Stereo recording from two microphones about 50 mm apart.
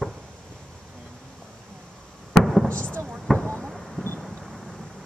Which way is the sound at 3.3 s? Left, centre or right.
Centre.